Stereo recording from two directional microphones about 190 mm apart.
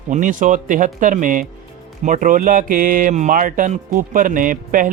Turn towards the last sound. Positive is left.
turn(degrees=-45)  # may be behind; listen again after turning